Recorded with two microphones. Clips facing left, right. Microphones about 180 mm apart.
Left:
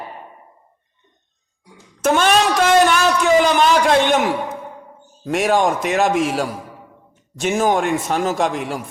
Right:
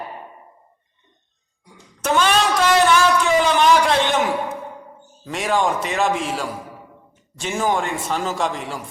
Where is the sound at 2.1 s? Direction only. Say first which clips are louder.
Left 3 dB; 50° left (ahead or behind).